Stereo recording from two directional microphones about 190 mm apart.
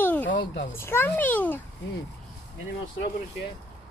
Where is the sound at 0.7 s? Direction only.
10° left (ahead or behind).